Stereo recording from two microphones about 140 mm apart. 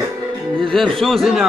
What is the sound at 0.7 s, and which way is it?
Speech, centre (ahead or behind).